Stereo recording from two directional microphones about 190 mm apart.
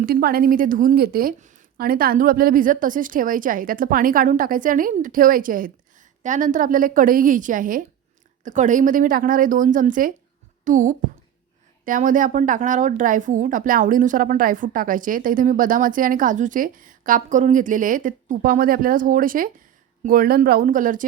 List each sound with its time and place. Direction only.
0.0 s speech: 50° right (ahead or behind)